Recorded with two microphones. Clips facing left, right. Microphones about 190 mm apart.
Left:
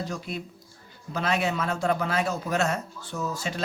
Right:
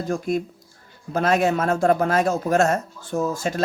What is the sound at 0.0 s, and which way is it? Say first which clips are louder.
A man's voice: right 9 dB; 50° right (ahead or behind).